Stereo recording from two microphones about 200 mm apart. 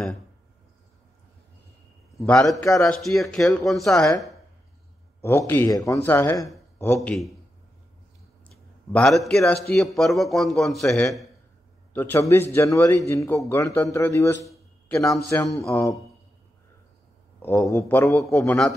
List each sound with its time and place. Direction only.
2.1 s a man's voice: 5° left (ahead or behind)
5.5 s a man's voice: 15° left (ahead or behind)
7.0 s a man's voice: centre (ahead or behind)
8.5 s a man's voice: 5° left (ahead or behind)
11.9 s a man's voice: 10° left (ahead or behind)
17.4 s a man's voice: 15° left (ahead or behind)